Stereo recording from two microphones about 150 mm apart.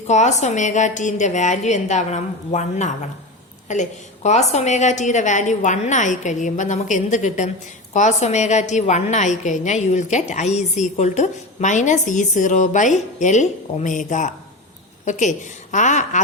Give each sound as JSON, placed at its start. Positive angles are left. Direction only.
{"t": 0.1, "sound": "a woman's voice", "side_deg": 50}